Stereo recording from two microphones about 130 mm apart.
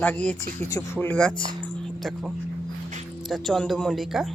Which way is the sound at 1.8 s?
Centre (ahead or behind).